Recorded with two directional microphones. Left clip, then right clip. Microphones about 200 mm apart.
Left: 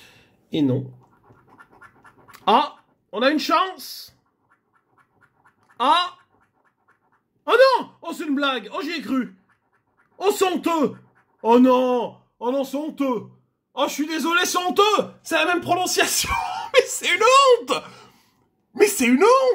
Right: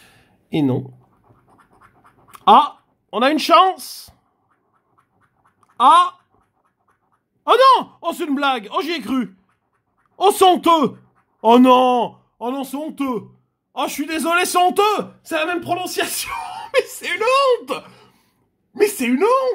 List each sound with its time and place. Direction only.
0.0 s a sound: 25° right (ahead or behind)
3.2 s speech: 40° right (ahead or behind)
7.4 s speech: 40° right (ahead or behind)
15.2 s speech: centre (ahead or behind)